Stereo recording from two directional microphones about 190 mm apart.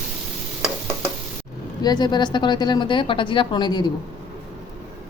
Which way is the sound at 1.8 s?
20° left (ahead or behind).